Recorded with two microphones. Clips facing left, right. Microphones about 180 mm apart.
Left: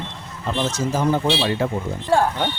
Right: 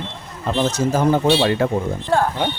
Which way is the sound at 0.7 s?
55° right (ahead or behind).